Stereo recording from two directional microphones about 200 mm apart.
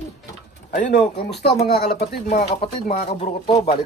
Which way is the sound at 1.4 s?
55° left (ahead or behind).